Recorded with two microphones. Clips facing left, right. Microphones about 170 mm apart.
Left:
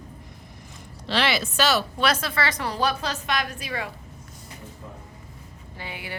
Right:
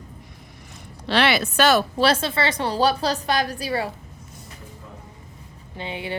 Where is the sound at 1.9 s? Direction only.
30° right (ahead or behind).